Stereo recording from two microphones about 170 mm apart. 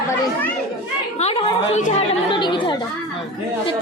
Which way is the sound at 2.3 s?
30° left (ahead or behind).